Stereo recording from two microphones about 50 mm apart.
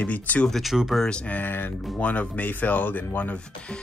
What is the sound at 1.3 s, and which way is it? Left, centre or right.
Speech, left.